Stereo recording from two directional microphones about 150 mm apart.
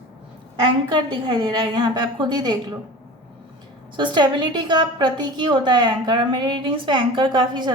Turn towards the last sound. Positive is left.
turn(degrees=-30)  # may be behind; listen again after turning